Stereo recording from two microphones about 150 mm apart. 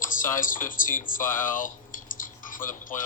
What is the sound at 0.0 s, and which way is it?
Speech, 60° left (ahead or behind).